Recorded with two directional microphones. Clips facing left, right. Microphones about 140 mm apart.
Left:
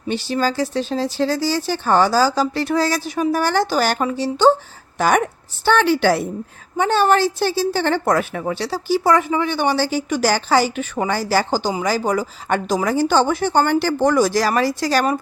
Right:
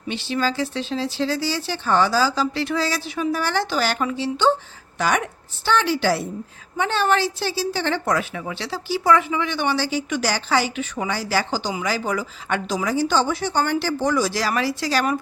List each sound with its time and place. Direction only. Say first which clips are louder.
0.1 s a woman's voice: left 3 dB; 40° left (ahead or behind)
6.7 s a woman's voice: left 5 dB; 45° left (ahead or behind)